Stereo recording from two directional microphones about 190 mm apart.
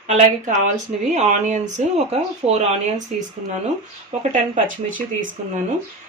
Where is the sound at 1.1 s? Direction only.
40° right (ahead or behind).